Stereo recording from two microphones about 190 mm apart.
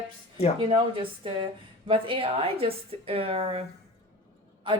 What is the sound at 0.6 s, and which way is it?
A woman's voice, 25° right (ahead or behind).